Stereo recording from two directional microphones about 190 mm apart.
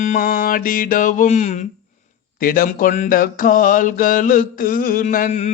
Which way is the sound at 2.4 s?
50° left (ahead or behind).